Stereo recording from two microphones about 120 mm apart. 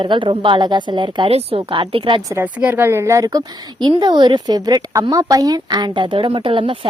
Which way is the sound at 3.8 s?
40° right (ahead or behind).